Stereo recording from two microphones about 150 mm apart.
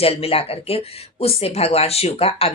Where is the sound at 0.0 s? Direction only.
40° left (ahead or behind).